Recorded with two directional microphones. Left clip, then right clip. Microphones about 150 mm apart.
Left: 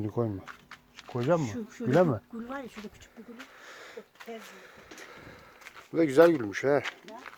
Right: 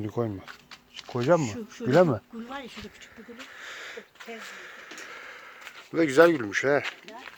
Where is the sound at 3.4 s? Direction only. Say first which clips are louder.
Right 8 dB; 5° left (ahead or behind).